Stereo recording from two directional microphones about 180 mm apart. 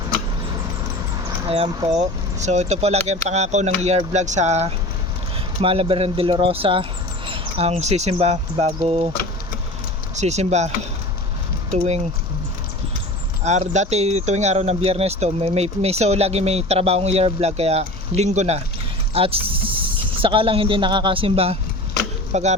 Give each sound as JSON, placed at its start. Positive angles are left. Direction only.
{"t": 1.5, "sound": "speech", "side_deg": -35}
{"t": 10.2, "sound": "speech", "side_deg": -40}
{"t": 11.7, "sound": "speech", "side_deg": -35}
{"t": 13.4, "sound": "a man's voice", "side_deg": -40}